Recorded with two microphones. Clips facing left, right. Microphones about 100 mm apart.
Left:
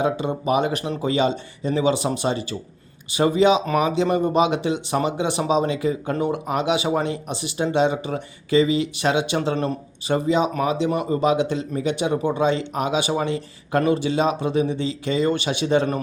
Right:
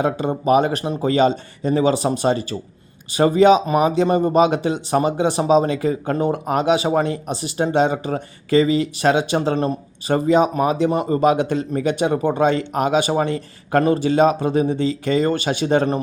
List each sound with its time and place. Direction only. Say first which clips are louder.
0.0 s speech: right 2 dB; 45° right (ahead or behind)